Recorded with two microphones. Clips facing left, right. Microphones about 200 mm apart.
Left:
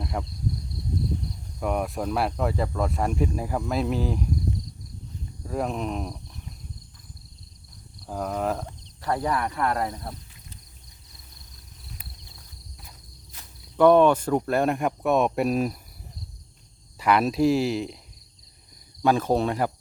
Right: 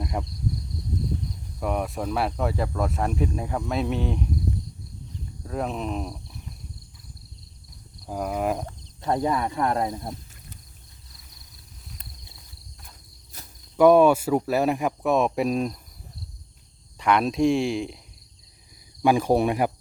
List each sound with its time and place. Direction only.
0.0 s speech: 5° right (ahead or behind)
1.5 s speech: centre (ahead or behind)
5.5 s speech: centre (ahead or behind)
8.1 s speech: 10° right (ahead or behind)
9.0 s speech: 20° right (ahead or behind)
13.7 s speech: 10° right (ahead or behind)
17.0 s speech: 5° left (ahead or behind)
19.0 s speech: 15° right (ahead or behind)